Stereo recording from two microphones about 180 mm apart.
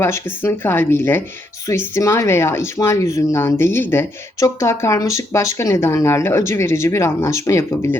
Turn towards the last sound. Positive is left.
turn(degrees=15)  # may be behind; listen again after turning